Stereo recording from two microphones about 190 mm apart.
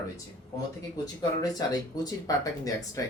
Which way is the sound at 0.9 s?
20° left (ahead or behind).